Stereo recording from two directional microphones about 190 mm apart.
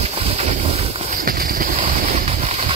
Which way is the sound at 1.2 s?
50° right (ahead or behind).